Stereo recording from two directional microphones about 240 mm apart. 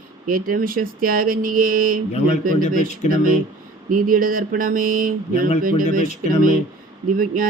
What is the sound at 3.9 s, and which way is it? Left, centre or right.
Speech, right.